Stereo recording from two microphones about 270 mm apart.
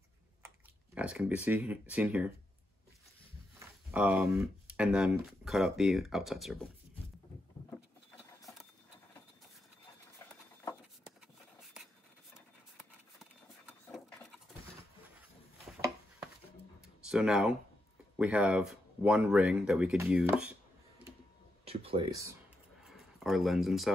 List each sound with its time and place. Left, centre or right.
0.9 s speech: centre
3.5 s speech: centre
10.1 s patter: centre
12.4 s a sound: centre
17.1 s speech: centre
21.6 s speech: centre
22.8 s a sound: centre